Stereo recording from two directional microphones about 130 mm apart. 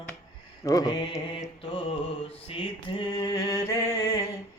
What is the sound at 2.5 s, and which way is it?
Mantra, 40° left (ahead or behind).